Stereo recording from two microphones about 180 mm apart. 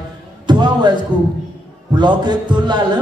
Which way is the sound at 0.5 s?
25° right (ahead or behind).